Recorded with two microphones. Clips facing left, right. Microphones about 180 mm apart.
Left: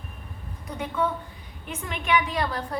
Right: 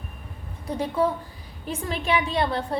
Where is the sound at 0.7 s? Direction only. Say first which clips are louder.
Right 4 dB; 35° right (ahead or behind).